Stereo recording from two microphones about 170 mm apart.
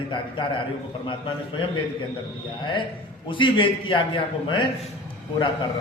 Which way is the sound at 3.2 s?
30° left (ahead or behind).